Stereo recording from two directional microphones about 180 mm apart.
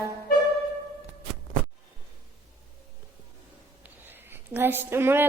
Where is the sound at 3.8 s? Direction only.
10° right (ahead or behind).